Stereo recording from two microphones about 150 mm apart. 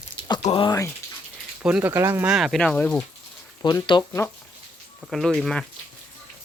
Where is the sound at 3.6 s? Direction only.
25° left (ahead or behind).